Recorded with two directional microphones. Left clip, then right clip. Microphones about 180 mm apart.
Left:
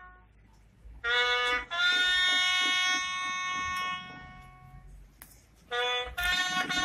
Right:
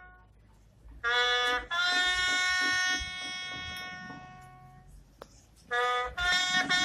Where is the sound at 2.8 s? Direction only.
20° left (ahead or behind).